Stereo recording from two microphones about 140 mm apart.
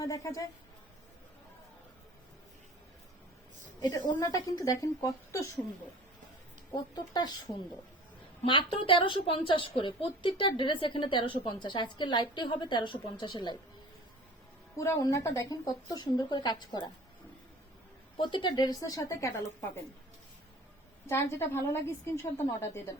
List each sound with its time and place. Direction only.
0.0 s a woman's voice: 25° left (ahead or behind)
3.8 s a woman's voice: 30° left (ahead or behind)
6.7 s a woman's voice: 30° left (ahead or behind)
14.8 s a woman's voice: 25° left (ahead or behind)
18.2 s a woman's voice: 35° left (ahead or behind)
21.1 s a woman's voice: 20° left (ahead or behind)